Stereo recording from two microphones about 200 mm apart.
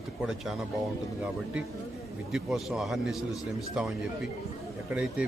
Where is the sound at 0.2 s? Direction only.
Centre (ahead or behind).